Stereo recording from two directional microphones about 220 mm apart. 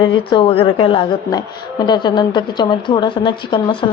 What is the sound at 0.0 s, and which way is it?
A woman's voice, 20° left (ahead or behind).